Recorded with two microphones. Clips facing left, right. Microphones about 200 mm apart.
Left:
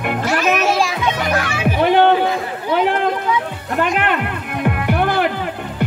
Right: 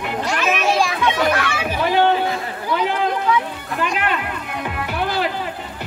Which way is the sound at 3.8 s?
55° left (ahead or behind).